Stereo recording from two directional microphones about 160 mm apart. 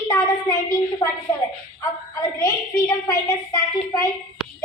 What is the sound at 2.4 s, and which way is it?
A woman's voice, 20° left (ahead or behind).